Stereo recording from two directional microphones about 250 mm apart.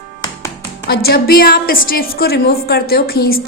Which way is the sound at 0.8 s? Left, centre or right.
Left.